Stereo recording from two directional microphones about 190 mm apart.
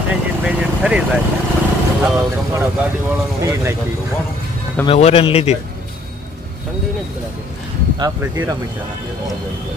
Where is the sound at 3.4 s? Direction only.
15° right (ahead or behind).